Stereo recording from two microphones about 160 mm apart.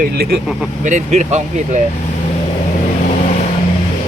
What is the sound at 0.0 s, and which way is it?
Speech, 70° right (ahead or behind).